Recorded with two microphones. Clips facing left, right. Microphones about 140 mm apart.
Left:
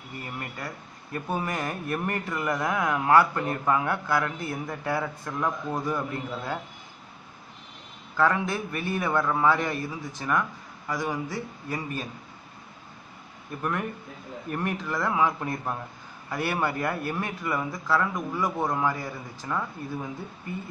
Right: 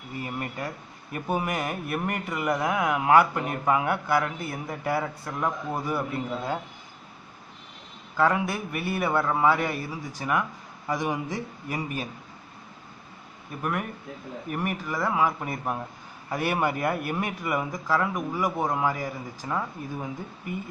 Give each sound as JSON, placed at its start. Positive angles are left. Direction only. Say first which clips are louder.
{"t": 0.2, "sound": "a man's voice", "louder": "right 4 dB", "side_deg": -15}
{"t": 8.2, "sound": "a man's voice", "louder": "right 1 dB", "side_deg": -10}
{"t": 13.6, "sound": "a man's voice", "louder": "even", "side_deg": -10}